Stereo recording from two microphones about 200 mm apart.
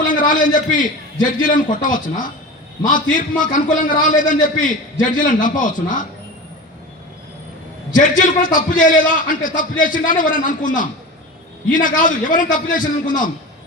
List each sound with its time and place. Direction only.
0.1 s a man's voice: 40° left (ahead or behind)
7.9 s a man's voice: 40° left (ahead or behind)